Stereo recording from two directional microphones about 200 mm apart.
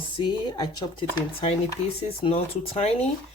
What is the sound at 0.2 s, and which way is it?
Speech, 20° left (ahead or behind).